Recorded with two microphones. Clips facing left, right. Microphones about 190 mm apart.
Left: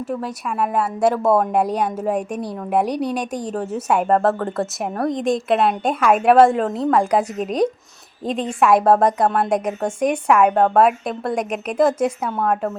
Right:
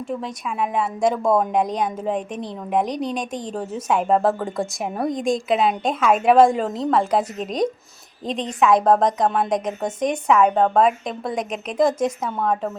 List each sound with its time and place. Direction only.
0.1 s a woman's voice: 5° left (ahead or behind)